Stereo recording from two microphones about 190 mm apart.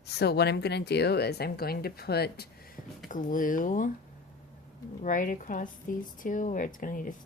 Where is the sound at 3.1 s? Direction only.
45° left (ahead or behind).